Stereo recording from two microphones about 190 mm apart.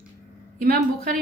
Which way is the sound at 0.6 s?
55° right (ahead or behind).